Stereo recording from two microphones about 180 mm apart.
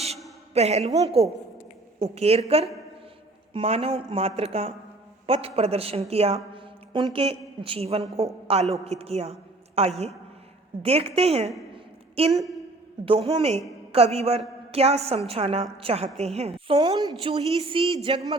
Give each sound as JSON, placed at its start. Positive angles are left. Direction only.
{"t": 0.5, "sound": "a woman's voice", "side_deg": -35}
{"t": 3.5, "sound": "a woman's voice", "side_deg": -30}